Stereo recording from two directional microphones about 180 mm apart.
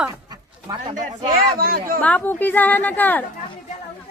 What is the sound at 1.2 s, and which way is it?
Speech, 55° right (ahead or behind).